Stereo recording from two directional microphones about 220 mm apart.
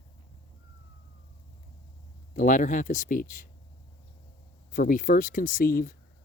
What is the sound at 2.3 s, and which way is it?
Speech, 35° left (ahead or behind).